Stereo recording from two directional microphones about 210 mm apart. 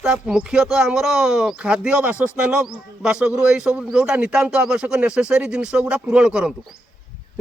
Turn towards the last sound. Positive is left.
turn(degrees=-5)  # may be behind; listen again after turning